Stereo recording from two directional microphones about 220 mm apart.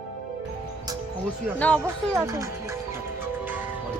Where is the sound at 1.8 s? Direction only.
15° right (ahead or behind).